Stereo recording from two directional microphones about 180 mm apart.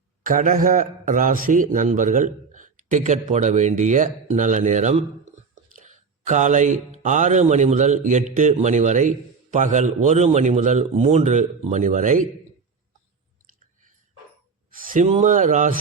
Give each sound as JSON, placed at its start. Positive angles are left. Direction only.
{"t": 0.3, "sound": "speech", "side_deg": -50}
{"t": 14.8, "sound": "speech", "side_deg": -40}